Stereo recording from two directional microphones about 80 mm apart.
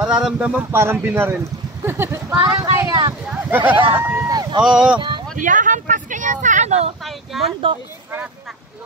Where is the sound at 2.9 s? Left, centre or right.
Right.